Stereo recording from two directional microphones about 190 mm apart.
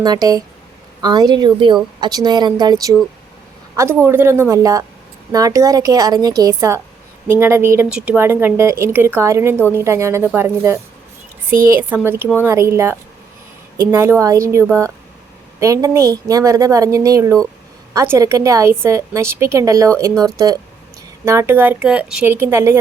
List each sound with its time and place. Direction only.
0.0 s a woman's voice: 20° right (ahead or behind)